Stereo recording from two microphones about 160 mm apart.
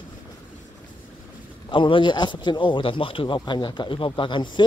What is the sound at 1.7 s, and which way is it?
Speech, 30° left (ahead or behind).